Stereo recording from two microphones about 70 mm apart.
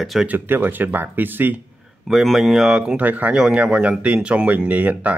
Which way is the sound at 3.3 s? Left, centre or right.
Centre.